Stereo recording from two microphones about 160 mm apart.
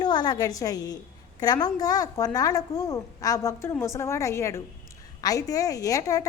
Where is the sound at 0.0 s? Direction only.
25° left (ahead or behind).